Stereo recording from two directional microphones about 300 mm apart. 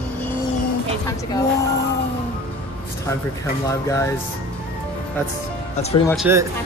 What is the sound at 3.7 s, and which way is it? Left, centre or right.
Speech, centre.